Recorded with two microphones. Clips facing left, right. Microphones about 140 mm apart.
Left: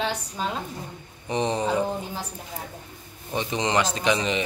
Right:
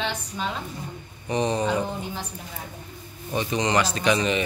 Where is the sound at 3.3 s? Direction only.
25° left (ahead or behind).